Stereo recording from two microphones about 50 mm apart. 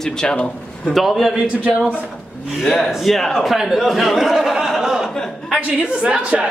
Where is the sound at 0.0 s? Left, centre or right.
Centre.